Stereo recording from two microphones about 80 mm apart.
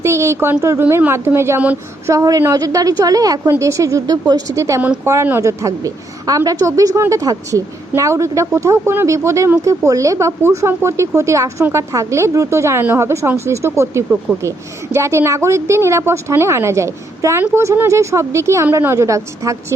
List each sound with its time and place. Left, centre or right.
0.0 s a sound: right
0.6 s a woman's voice: right
2.0 s a woman's voice: right